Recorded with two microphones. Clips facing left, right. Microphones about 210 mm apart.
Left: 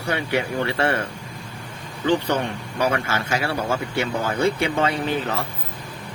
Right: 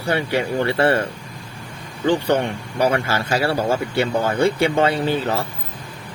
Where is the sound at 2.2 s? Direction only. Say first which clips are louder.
Right 4 dB; 30° right (ahead or behind).